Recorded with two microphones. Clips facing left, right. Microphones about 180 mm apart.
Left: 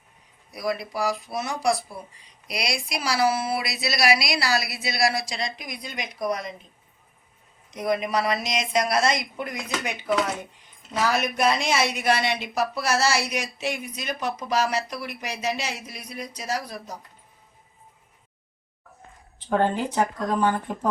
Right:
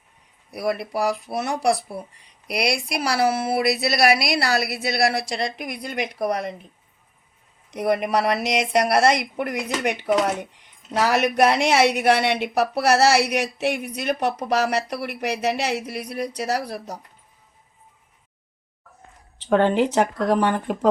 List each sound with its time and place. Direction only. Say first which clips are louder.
0.5 s speech: right 4 dB; 60° right (ahead or behind)
7.7 s speech: right 4 dB; 60° right (ahead or behind)
19.4 s speech: right 5 dB; 80° right